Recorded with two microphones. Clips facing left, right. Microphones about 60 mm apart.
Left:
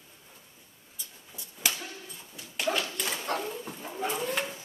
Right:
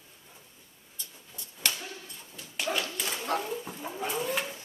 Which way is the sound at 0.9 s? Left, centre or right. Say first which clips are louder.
Even; centre.